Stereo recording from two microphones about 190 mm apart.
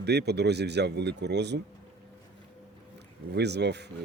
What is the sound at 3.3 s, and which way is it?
Speech, 60° right (ahead or behind).